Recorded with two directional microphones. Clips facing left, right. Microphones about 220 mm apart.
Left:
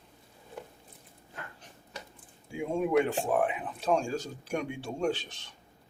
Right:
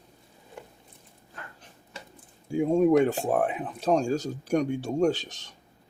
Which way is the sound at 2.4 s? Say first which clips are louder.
Right 9 dB; 40° right (ahead or behind).